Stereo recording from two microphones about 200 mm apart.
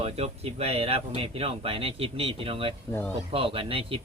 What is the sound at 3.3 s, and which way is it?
Speech, 25° right (ahead or behind).